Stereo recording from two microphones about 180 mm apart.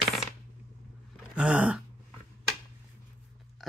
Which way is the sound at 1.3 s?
5° right (ahead or behind).